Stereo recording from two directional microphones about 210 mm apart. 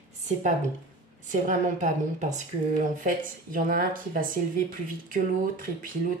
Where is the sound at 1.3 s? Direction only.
35° right (ahead or behind).